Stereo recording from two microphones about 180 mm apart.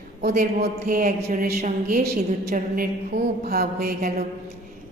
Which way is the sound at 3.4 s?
60° right (ahead or behind).